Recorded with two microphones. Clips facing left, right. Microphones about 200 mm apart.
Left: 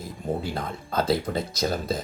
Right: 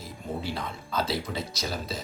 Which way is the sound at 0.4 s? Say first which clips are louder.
Left 3 dB; 50° left (ahead or behind).